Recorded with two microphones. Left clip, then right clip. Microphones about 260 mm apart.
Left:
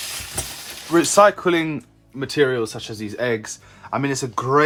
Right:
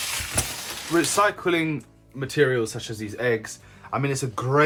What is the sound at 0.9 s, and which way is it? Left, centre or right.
Speech, left.